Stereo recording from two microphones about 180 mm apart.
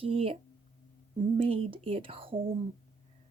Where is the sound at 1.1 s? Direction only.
30° right (ahead or behind).